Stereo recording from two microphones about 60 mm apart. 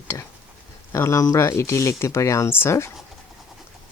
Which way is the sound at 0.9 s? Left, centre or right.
Left.